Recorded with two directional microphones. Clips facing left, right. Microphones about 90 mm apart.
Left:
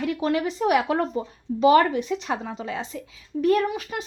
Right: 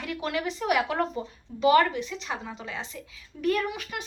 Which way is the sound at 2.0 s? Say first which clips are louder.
Left 7 dB; 50° left (ahead or behind).